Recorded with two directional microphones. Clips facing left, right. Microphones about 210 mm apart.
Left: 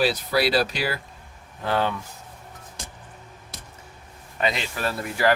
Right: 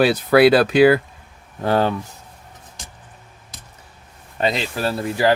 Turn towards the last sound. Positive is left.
turn(degrees=-30)  # may be behind; listen again after turning